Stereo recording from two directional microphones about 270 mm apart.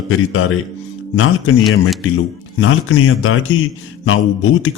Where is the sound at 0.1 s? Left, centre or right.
Left.